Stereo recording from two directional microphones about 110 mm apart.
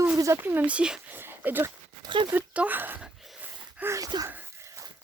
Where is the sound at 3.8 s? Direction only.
25° right (ahead or behind).